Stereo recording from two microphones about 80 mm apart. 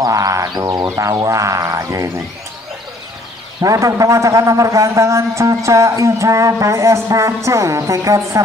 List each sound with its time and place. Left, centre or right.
0.0 s speech: right
3.6 s a man's voice: right